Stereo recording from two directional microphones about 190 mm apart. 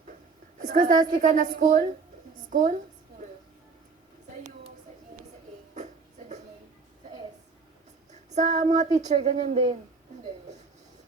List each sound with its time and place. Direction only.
0.6 s a woman's voice: 40° right (ahead or behind)
5.7 s music: 40° right (ahead or behind)
8.3 s speech: 35° right (ahead or behind)